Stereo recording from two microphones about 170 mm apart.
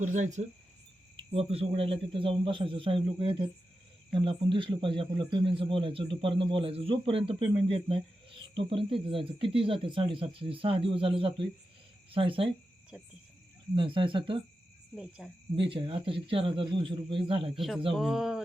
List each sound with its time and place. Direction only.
0.0 s speech: 45° right (ahead or behind)
12.9 s speech: centre (ahead or behind)
13.7 s speech: 30° right (ahead or behind)
15.2 s speech: 5° right (ahead or behind)
15.5 s speech: 30° right (ahead or behind)
17.9 s speech: centre (ahead or behind)